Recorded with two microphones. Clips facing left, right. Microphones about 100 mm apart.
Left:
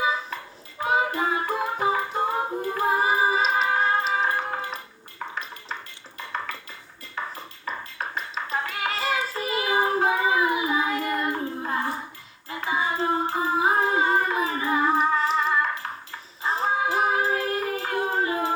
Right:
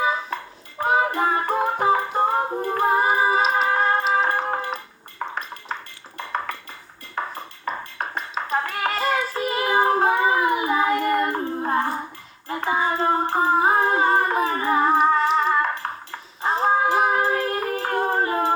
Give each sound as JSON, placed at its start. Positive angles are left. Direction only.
{"t": 0.0, "sound": "a sound", "side_deg": -40}
{"t": 0.8, "sound": "music", "side_deg": -45}
{"t": 5.2, "sound": "ping", "side_deg": -40}
{"t": 6.1, "sound": "dishes", "side_deg": -50}
{"t": 7.2, "sound": "a sound", "side_deg": -40}
{"t": 12.5, "sound": "female singing", "side_deg": -45}
{"t": 13.4, "sound": "humming", "side_deg": -45}
{"t": 13.8, "sound": "music", "side_deg": -40}